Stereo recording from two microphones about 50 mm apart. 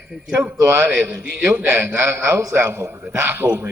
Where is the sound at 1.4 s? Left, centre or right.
Right.